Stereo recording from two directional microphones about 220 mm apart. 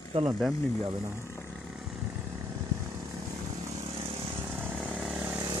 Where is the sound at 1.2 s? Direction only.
10° left (ahead or behind).